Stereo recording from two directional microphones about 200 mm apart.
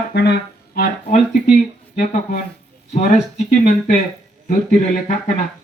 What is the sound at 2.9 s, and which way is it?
Speech, 35° left (ahead or behind).